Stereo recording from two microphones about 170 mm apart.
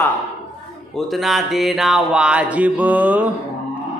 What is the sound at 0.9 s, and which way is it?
Music, centre (ahead or behind).